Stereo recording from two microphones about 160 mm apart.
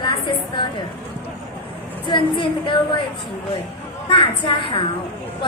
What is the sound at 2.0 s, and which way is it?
Speech, 30° left (ahead or behind).